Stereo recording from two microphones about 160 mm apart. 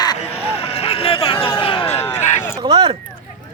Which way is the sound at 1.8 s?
15° left (ahead or behind).